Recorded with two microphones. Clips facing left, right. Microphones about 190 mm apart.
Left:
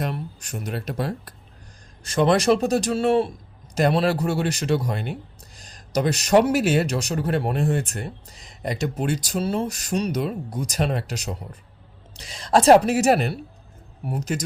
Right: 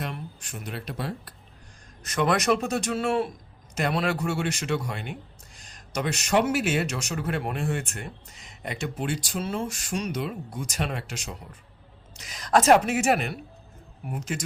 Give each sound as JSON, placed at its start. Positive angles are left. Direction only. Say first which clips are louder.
{"t": 0.0, "sound": "speech", "louder": "left 6 dB", "side_deg": 40}
{"t": 2.0, "sound": "speech", "louder": "left 5 dB", "side_deg": 30}